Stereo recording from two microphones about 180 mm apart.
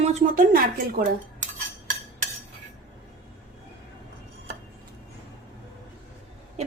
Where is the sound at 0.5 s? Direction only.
55° right (ahead or behind).